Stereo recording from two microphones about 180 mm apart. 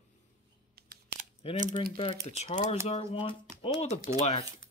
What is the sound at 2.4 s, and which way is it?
Speech, 35° left (ahead or behind).